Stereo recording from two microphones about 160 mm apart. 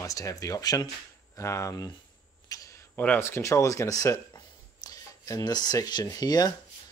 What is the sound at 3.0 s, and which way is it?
Speech, 15° left (ahead or behind).